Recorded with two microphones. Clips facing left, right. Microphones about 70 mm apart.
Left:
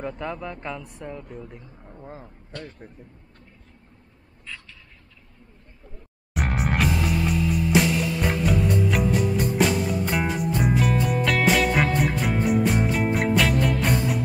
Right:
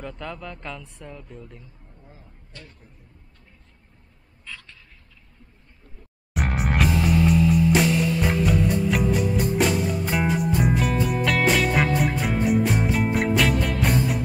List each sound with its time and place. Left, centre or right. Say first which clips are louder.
0.2 s speech: left 3 dB; left
1.9 s a sound: left 10 dB; left
6.3 s music: even; centre